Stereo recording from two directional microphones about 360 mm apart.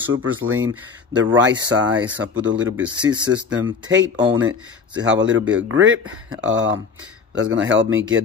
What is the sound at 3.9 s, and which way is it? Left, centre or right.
Speech, right.